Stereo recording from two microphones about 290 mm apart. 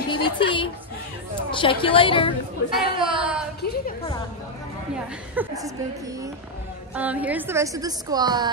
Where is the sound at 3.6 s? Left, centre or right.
Left.